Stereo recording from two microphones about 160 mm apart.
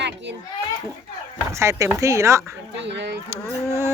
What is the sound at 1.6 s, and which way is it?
Speech, 20° right (ahead or behind).